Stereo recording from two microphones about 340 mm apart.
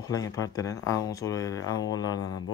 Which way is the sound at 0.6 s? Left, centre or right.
Centre.